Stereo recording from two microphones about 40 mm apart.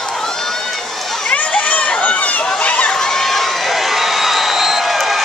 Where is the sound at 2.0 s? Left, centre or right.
Left.